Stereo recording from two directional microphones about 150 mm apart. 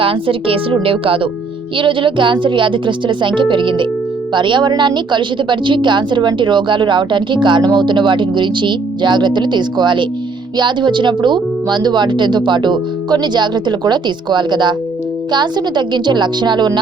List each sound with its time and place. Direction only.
0.0 s a woman's voice: 35° right (ahead or behind)